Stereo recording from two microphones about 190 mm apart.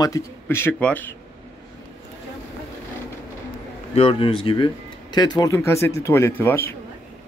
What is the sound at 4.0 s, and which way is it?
A man's voice, 30° left (ahead or behind).